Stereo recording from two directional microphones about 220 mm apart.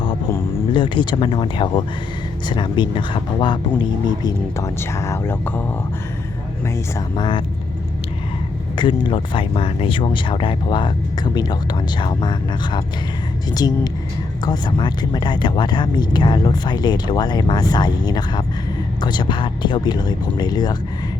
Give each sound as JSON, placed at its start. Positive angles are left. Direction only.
{"t": 0.7, "sound": "speech", "side_deg": 20}
{"t": 7.2, "sound": "speech", "side_deg": 20}
{"t": 8.7, "sound": "speech", "side_deg": 20}